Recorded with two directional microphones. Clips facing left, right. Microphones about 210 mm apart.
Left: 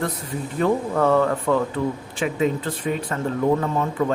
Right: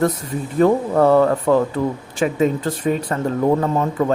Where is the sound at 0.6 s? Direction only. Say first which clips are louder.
Right 6 dB; 35° right (ahead or behind).